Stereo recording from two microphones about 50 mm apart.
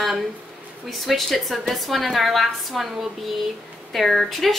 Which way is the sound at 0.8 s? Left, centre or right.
Centre.